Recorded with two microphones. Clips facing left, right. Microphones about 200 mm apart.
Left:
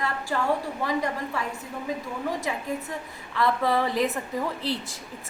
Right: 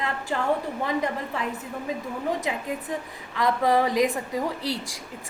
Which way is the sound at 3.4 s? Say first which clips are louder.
Right 2 dB; 15° right (ahead or behind).